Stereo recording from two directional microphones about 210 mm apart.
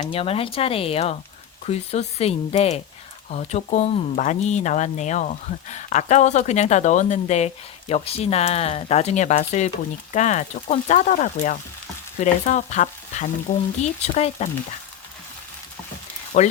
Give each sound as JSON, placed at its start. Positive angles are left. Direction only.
{"t": 0.0, "sound": "speech", "side_deg": 25}
{"t": 16.3, "sound": "speech", "side_deg": 35}